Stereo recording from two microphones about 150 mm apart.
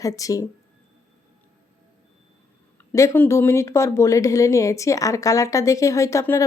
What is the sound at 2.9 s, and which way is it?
Speech, 20° left (ahead or behind).